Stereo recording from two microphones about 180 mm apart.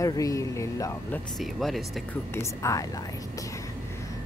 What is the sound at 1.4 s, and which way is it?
Speech, centre (ahead or behind).